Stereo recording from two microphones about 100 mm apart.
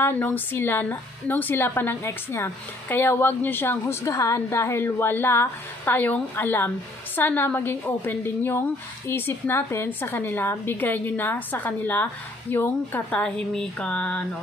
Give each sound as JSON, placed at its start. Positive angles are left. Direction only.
{"t": 0.0, "sound": "a woman's voice", "side_deg": 20}
{"t": 13.6, "sound": "mantra", "side_deg": 10}